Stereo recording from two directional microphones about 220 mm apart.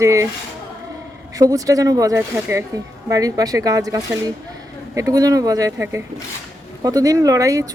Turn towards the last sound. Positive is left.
turn(degrees=-15)  # may be behind; listen again after turning